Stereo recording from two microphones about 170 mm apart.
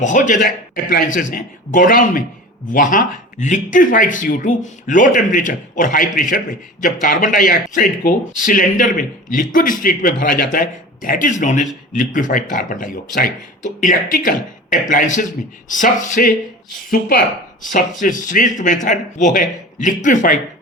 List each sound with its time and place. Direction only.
0.0 s speech: 45° left (ahead or behind)